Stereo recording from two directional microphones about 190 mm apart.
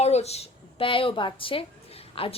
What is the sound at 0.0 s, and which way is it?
A woman's voice, 35° left (ahead or behind).